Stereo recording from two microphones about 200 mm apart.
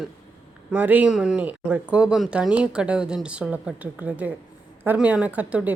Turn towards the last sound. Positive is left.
turn(degrees=-5)  # may be behind; listen again after turning